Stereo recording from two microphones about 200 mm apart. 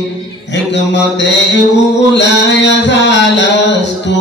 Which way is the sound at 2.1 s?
60° left (ahead or behind).